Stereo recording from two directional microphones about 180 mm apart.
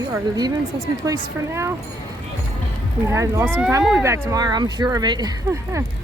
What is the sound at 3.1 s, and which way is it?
Speech, 15° right (ahead or behind).